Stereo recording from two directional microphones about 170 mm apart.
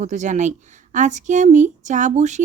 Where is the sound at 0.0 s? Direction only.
45° right (ahead or behind).